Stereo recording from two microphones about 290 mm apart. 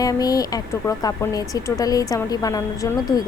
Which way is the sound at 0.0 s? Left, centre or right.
Centre.